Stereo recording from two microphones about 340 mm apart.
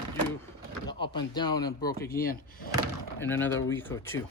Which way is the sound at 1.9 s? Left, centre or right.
Left.